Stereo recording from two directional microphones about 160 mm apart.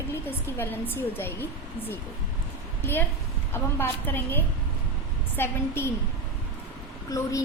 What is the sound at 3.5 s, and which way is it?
A woman's voice, 15° left (ahead or behind).